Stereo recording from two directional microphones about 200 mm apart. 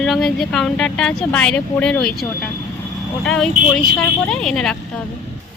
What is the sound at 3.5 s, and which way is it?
Speech, 40° right (ahead or behind).